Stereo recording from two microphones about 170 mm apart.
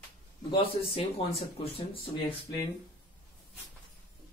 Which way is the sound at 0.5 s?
30° left (ahead or behind).